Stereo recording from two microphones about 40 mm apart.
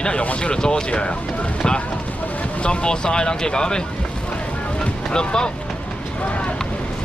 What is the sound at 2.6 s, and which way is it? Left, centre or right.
Speech, left.